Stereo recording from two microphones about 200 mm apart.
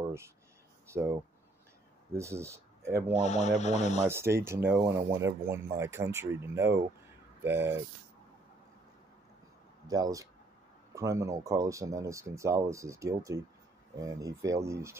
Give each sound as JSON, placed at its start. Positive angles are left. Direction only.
{"t": 0.8, "sound": "speech", "side_deg": -15}
{"t": 2.1, "sound": "speech", "side_deg": -15}
{"t": 3.2, "sound": "speech", "side_deg": 35}
{"t": 4.1, "sound": "speech", "side_deg": -10}
{"t": 9.8, "sound": "speech", "side_deg": -20}